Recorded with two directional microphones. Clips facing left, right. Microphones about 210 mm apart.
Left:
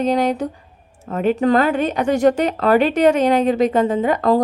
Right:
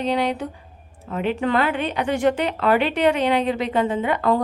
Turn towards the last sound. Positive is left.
turn(degrees=40)  # may be behind; listen again after turning